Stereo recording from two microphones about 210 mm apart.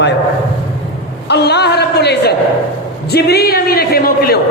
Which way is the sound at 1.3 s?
50° left (ahead or behind).